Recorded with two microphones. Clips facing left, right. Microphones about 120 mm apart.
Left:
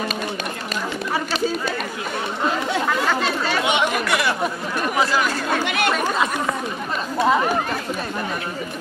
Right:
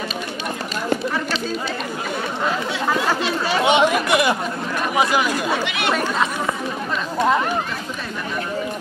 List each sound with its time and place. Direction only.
3.4 s chatter: 20° right (ahead or behind)
4.9 s speech: 20° right (ahead or behind)